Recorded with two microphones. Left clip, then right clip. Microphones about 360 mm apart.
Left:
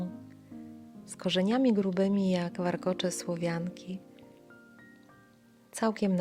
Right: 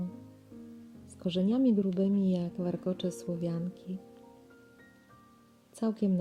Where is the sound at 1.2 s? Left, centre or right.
Centre.